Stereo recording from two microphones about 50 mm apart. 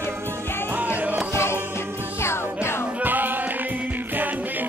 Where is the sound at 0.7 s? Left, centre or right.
Right.